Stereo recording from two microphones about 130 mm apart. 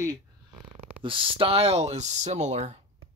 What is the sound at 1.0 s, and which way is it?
Speech, 40° right (ahead or behind).